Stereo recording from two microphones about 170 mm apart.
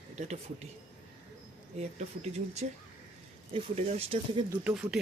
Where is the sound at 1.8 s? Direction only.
40° right (ahead or behind).